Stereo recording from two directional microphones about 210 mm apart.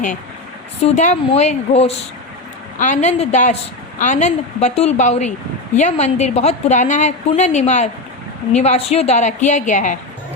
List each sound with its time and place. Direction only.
0.8 s a woman's voice: 35° left (ahead or behind)